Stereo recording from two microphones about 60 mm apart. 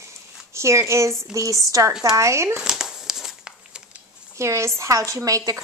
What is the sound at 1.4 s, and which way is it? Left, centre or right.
Speech, right.